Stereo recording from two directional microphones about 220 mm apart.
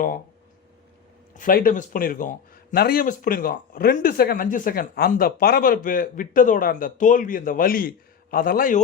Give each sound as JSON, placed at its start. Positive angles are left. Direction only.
{"t": 1.3, "sound": "speech", "side_deg": 40}